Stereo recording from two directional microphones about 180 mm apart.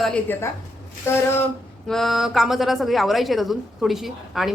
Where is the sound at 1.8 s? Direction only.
Centre (ahead or behind).